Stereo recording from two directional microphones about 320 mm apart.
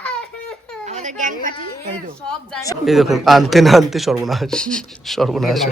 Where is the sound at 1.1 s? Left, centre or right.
Right.